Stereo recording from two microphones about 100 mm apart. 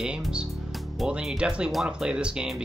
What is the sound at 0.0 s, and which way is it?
Speech, 10° right (ahead or behind).